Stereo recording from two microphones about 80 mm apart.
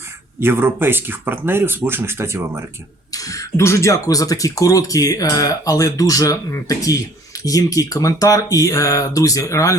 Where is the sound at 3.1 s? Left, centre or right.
Left.